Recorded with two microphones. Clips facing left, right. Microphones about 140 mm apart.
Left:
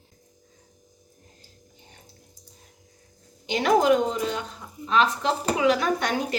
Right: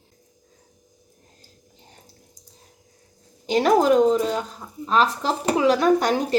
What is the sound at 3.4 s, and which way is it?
A woman's voice, 40° right (ahead or behind).